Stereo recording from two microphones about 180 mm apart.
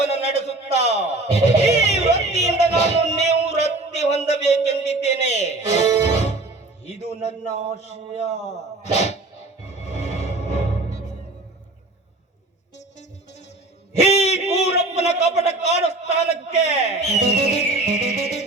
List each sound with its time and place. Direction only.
0.0 s music: 40° left (ahead or behind)
3.9 s a sound: 40° left (ahead or behind)
5.0 s music: 40° left (ahead or behind)
7.8 s dog: 40° left (ahead or behind)
9.6 s music: 40° left (ahead or behind)
14.0 s a sound: 35° left (ahead or behind)